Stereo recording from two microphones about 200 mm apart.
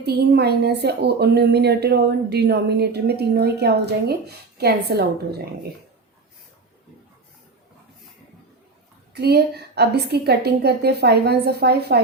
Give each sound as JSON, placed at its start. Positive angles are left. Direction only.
{"t": 0.0, "sound": "speech", "side_deg": -55}
{"t": 9.1, "sound": "a woman's voice", "side_deg": -55}